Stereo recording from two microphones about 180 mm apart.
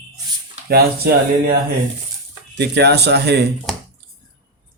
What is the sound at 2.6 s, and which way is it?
Speech, 65° right (ahead or behind).